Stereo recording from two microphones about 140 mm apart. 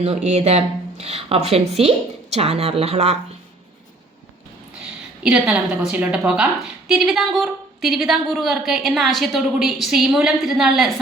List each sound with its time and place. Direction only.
0.3 s speech: 50° right (ahead or behind)
5.2 s a woman's voice: 10° right (ahead or behind)